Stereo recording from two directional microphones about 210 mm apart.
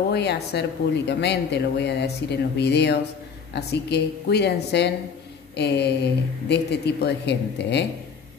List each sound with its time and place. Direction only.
0.1 s speech: 50° left (ahead or behind)